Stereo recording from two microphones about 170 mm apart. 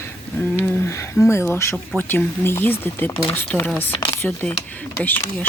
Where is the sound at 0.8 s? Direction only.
15° left (ahead or behind).